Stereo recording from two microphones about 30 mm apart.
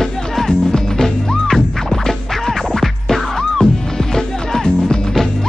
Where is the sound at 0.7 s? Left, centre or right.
Centre.